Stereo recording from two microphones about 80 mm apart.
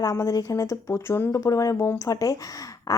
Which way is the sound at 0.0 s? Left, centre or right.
Left.